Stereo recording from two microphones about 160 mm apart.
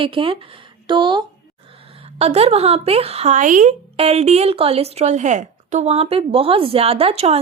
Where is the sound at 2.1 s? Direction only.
40° right (ahead or behind).